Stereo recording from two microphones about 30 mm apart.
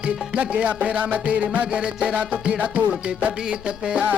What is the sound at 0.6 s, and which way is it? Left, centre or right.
Music, right.